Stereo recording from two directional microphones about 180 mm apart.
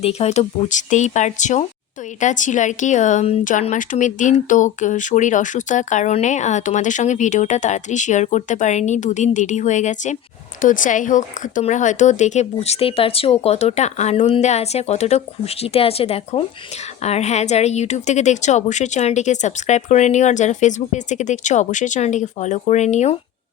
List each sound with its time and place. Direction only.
0.0 s a woman's voice: 35° left (ahead or behind)